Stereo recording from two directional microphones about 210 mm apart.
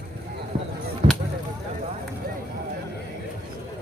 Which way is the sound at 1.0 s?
30° right (ahead or behind).